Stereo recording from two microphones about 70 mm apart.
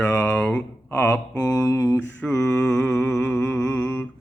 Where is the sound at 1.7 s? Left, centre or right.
Left.